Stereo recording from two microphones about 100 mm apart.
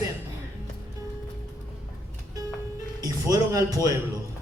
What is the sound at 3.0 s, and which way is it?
Speech, 35° right (ahead or behind).